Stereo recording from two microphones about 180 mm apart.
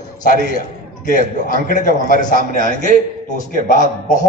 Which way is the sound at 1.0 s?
50° left (ahead or behind).